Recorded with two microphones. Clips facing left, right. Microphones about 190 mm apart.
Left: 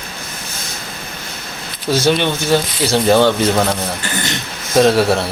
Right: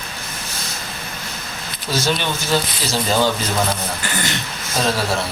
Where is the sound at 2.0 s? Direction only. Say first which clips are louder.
Left 7 dB; 60° left (ahead or behind).